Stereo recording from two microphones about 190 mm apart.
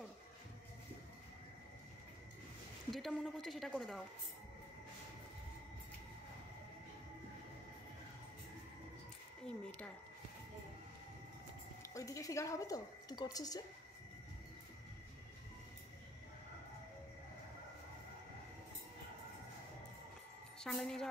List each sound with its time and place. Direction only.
2.9 s a woman's voice: centre (ahead or behind)
11.8 s speech: 15° left (ahead or behind)
20.5 s a woman's voice: centre (ahead or behind)